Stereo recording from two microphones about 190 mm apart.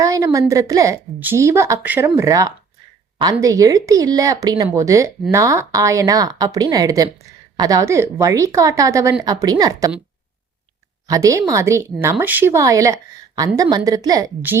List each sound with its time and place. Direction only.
0.0 s a woman's voice: 15° right (ahead or behind)
11.1 s a woman's voice: 15° right (ahead or behind)